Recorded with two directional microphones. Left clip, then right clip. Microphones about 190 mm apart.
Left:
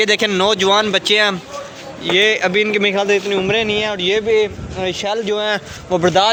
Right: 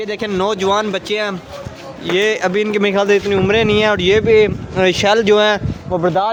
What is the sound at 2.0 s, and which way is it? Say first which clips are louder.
Speech: left 1 dB; 15° right (ahead or behind).